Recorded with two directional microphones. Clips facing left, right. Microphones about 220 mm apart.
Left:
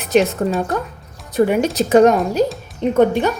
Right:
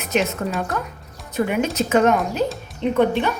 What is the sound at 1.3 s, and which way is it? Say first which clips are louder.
Speech: left 5 dB; 35° left (ahead or behind).